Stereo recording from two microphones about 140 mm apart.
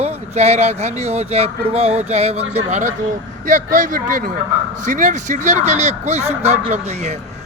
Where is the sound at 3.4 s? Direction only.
70° right (ahead or behind); by 7.1 s 50° right (ahead or behind).